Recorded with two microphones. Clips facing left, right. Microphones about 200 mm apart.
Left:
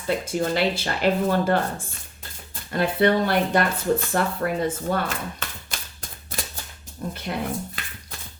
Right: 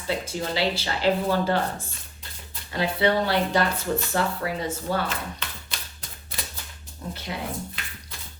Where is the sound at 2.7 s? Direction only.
50° left (ahead or behind).